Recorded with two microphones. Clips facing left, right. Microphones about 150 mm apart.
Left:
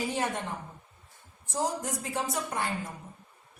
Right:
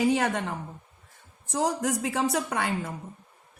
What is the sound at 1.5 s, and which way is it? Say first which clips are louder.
A woman's voice: right 5 dB; 90° right.